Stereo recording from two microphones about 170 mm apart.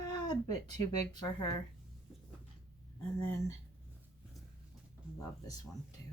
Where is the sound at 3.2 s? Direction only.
15° left (ahead or behind).